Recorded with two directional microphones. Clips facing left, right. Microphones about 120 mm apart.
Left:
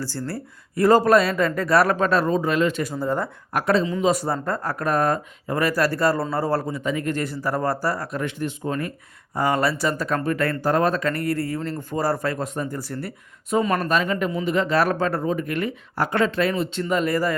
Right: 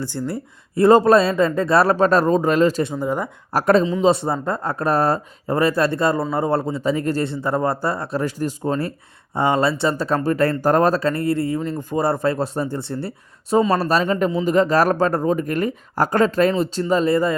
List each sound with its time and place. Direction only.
0.3 s speech: 20° right (ahead or behind); by 2.8 s 35° right (ahead or behind)
2.8 s speech: 15° right (ahead or behind)
3.5 s a woman's voice: 45° right (ahead or behind)
3.8 s speech: 25° right (ahead or behind)
9.3 s speech: 25° right (ahead or behind)
11.1 s speech: 25° right (ahead or behind)